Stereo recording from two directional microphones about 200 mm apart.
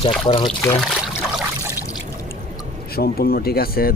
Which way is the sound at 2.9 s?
50° left (ahead or behind).